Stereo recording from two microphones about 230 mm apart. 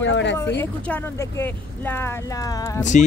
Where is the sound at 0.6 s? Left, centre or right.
Centre.